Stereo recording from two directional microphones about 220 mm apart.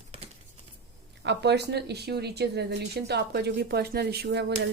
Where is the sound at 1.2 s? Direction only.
50° right (ahead or behind).